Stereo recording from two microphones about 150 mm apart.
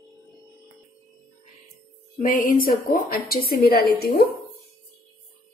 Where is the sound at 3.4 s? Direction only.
85° left.